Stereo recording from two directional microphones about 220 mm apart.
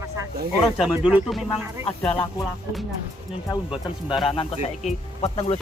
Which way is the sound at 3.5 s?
25° left (ahead or behind).